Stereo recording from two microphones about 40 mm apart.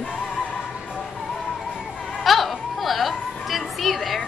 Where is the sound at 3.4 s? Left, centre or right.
Centre.